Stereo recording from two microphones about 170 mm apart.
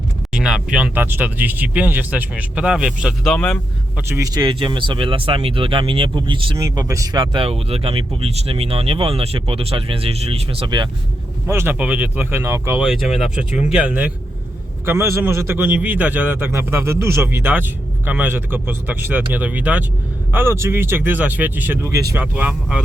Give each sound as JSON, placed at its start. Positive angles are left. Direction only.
{"t": 0.3, "sound": "a man's voice", "side_deg": -5}
{"t": 3.9, "sound": "speech", "side_deg": -15}
{"t": 11.4, "sound": "a man's voice", "side_deg": -15}
{"t": 12.8, "sound": "a man's voice", "side_deg": 0}